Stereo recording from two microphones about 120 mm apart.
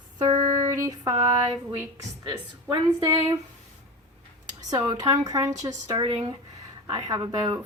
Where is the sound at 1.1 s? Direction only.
65° right (ahead or behind).